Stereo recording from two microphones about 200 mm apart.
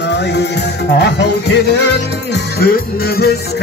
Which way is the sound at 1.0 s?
60° left (ahead or behind).